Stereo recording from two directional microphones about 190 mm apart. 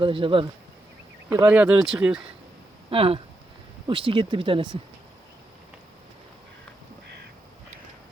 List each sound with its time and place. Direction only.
0.0 s speech: 30° right (ahead or behind)
1.3 s speech: 10° right (ahead or behind)
2.9 s speech: 30° right (ahead or behind)